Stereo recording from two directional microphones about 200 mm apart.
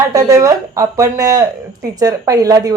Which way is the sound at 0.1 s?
15° right (ahead or behind).